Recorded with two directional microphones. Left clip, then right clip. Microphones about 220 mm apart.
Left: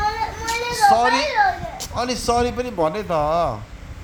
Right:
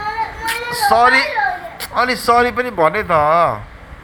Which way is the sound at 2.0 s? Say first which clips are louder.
Right 7 dB; centre (ahead or behind).